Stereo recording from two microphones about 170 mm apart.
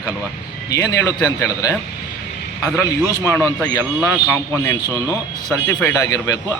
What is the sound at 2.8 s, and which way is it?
A man's voice, 15° left (ahead or behind).